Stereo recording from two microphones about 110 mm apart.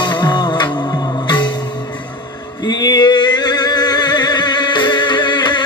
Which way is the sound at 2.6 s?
40° left (ahead or behind).